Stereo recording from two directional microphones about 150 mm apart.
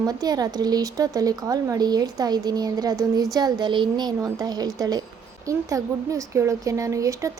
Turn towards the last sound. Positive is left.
turn(degrees=-20)  # may be behind; listen again after turning